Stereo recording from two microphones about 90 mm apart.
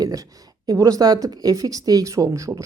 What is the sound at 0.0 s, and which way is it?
A woman's voice, 40° right (ahead or behind).